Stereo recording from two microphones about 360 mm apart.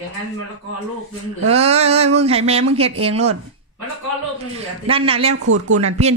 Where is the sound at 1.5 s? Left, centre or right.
Centre.